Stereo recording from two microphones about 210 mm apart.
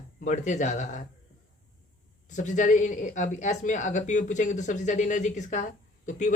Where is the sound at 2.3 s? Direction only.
35° left (ahead or behind).